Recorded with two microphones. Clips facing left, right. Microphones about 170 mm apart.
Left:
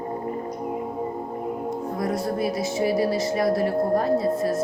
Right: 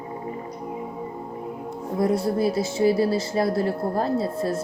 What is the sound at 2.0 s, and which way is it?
Speech, 30° right (ahead or behind).